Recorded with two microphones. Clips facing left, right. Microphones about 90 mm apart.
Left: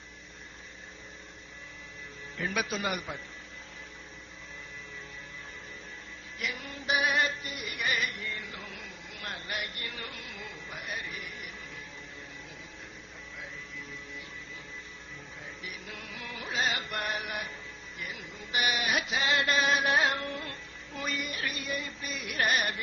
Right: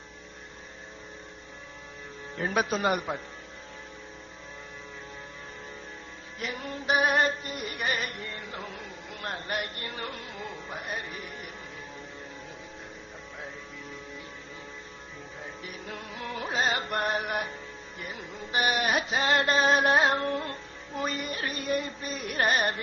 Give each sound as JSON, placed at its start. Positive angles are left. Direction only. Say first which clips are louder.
{"t": 2.4, "sound": "a man's voice", "louder": "right 5 dB", "side_deg": -40}
{"t": 6.4, "sound": "music", "louder": "right 3 dB", "side_deg": -40}
{"t": 15.6, "sound": "music", "louder": "right 3 dB", "side_deg": -40}